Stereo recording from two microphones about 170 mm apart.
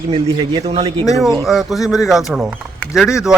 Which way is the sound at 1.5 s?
Centre (ahead or behind).